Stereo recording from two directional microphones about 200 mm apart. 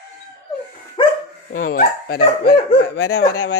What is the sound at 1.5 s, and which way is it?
Speech, 45° left (ahead or behind).